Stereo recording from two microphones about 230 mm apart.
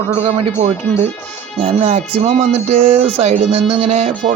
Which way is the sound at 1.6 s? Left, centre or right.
Right.